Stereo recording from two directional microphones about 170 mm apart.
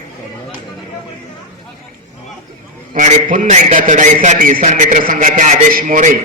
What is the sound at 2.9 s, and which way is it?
A man's voice, 45° right (ahead or behind).